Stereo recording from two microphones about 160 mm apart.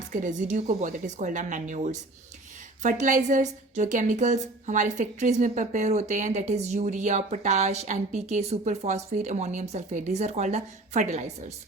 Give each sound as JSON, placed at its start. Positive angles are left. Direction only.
{"t": 0.1, "sound": "a woman's voice", "side_deg": -50}